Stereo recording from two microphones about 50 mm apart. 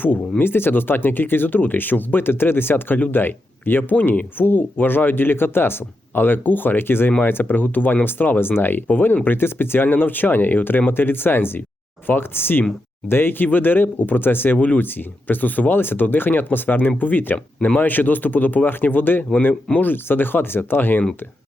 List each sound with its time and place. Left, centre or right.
0.0 s speech: left